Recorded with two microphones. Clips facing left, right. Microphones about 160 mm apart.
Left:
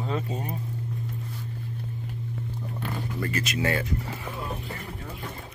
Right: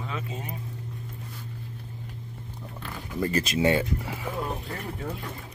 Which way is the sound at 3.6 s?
25° right (ahead or behind).